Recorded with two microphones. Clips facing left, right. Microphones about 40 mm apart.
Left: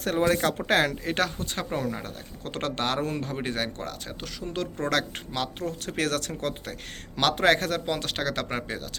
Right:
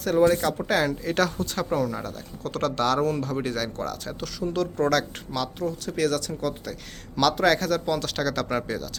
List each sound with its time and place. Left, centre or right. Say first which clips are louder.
0.0 s speech: right 3 dB; left
1.0 s speech: right 3 dB; left
7.2 s speech: right 1 dB; left